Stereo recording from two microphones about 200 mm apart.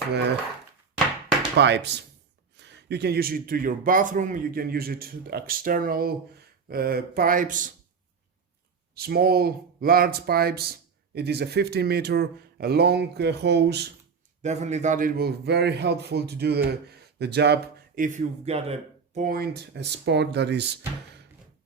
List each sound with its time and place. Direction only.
1.5 s a man's voice: 60° right (ahead or behind); by 7.7 s 40° right (ahead or behind)
9.0 s a man's voice: 50° right (ahead or behind)
14.4 s a man's voice: 35° right (ahead or behind); by 20.7 s 60° right (ahead or behind)